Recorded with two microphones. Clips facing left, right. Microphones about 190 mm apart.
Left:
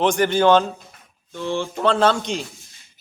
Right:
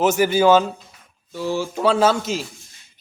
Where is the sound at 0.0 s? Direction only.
5° right (ahead or behind).